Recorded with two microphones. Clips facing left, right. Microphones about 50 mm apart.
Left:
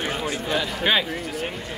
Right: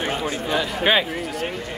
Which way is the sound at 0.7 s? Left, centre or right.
Centre.